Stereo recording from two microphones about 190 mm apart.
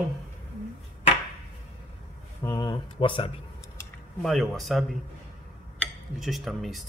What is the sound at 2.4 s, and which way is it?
Speech, 20° left (ahead or behind).